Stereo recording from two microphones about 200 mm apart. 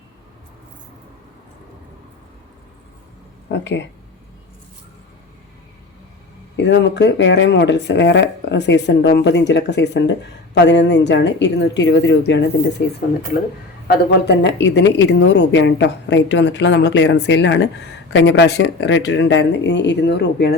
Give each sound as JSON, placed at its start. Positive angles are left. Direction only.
{"t": 3.5, "sound": "speech", "side_deg": 65}
{"t": 6.6, "sound": "speech", "side_deg": 60}
{"t": 13.8, "sound": "speech", "side_deg": 55}